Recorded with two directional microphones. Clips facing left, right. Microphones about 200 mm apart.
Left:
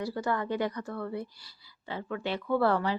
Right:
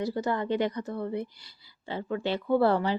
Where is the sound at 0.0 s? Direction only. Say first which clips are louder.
Right 2 dB; 20° right (ahead or behind).